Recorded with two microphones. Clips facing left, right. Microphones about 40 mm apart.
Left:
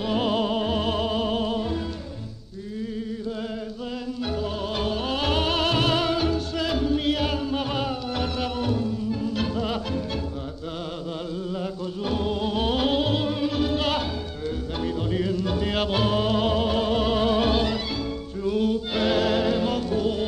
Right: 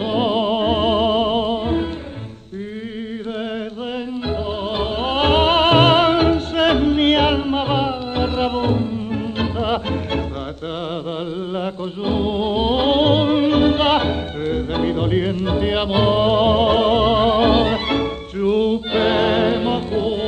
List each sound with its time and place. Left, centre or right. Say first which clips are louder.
0.0 s music: right 5 dB; right
4.3 s music: right 5 dB; right
11.5 s music: right 5 dB; right
12.9 s music: right 9 dB; right
17.8 s music: right 9 dB; right